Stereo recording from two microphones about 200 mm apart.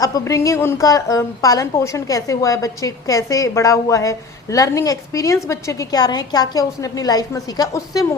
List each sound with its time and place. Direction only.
0.0 s speech: 15° left (ahead or behind)